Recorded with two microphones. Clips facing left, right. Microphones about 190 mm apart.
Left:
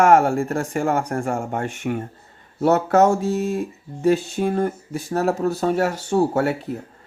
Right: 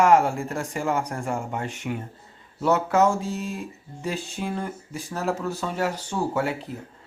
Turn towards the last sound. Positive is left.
turn(degrees=45)  # may be behind; listen again after turning